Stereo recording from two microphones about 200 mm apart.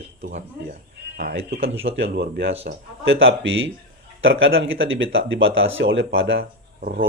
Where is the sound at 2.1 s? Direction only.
55° right (ahead or behind).